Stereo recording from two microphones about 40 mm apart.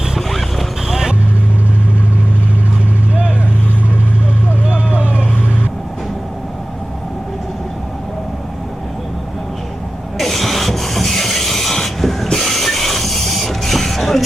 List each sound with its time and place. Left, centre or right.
0.9 s vehicle: centre
4.9 s vehicle: right
10.2 s rub: centre